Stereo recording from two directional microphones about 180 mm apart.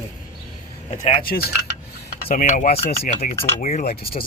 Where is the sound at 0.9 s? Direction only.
50° left (ahead or behind).